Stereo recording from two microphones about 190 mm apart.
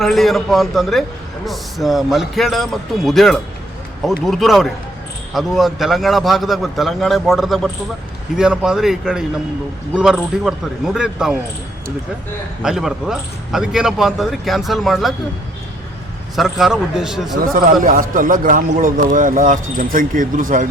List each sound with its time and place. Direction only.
0.0 s speech: centre (ahead or behind)
12.6 s speech: 5° right (ahead or behind)
16.3 s speech: centre (ahead or behind)
17.4 s a man's voice: 45° right (ahead or behind)